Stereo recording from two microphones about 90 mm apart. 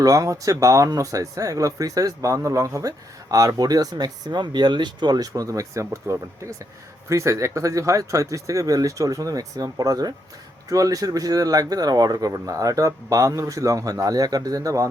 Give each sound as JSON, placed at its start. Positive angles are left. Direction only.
{"t": 0.0, "sound": "speech", "side_deg": -40}